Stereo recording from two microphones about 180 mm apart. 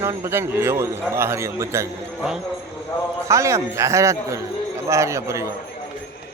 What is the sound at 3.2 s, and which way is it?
A man's voice, 15° right (ahead or behind).